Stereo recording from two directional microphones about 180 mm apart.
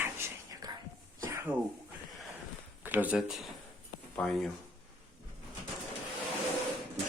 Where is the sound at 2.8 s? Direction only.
10° right (ahead or behind).